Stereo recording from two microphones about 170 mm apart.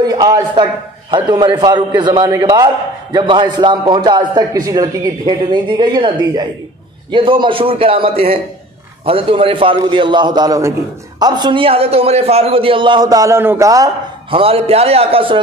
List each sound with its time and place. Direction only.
0.0 s a man's voice: 25° right (ahead or behind)
14.3 s a man's voice: 35° right (ahead or behind)